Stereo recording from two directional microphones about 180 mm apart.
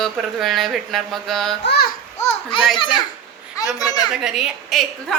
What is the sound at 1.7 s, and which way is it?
Babbling, 60° left (ahead or behind).